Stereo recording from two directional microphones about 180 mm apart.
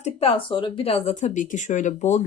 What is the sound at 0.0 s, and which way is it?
Speech, 35° left (ahead or behind).